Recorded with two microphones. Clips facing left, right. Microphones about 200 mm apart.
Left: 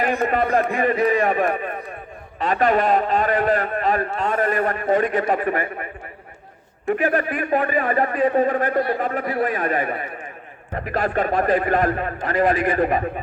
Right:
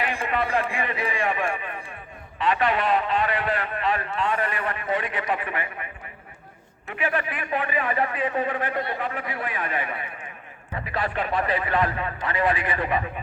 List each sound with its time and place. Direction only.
0.0 s a man's voice: 40° left (ahead or behind)
6.9 s a man's voice: 40° left (ahead or behind)